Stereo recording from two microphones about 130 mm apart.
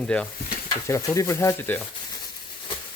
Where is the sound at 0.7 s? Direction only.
25° left (ahead or behind).